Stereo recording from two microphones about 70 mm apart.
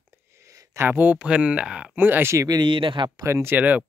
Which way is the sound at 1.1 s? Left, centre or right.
Centre.